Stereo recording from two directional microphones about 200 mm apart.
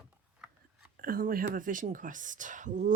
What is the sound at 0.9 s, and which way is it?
Speech, 45° right (ahead or behind).